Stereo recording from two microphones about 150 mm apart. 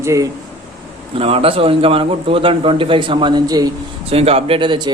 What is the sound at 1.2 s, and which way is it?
A man's voice, 40° right (ahead or behind).